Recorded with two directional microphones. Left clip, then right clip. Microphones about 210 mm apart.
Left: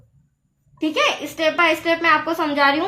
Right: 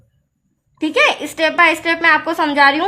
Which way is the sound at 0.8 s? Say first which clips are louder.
Right 5 dB; 50° right (ahead or behind).